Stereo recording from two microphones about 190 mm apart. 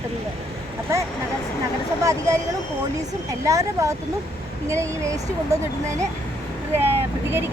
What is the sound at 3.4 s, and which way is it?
Speech, 15° right (ahead or behind).